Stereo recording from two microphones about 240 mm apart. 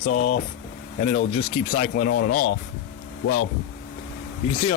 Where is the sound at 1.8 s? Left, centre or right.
Left.